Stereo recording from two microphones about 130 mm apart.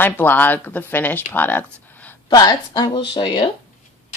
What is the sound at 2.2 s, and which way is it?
Speech, 30° left (ahead or behind).